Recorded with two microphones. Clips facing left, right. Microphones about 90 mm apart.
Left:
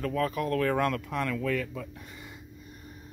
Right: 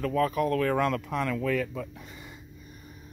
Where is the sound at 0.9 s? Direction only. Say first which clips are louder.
Right 2 dB; 20° right (ahead or behind).